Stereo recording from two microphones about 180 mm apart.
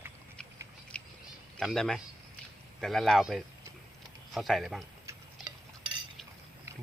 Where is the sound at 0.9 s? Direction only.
5° left (ahead or behind).